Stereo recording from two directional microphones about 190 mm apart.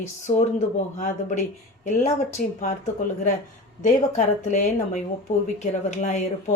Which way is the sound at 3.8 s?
40° left (ahead or behind).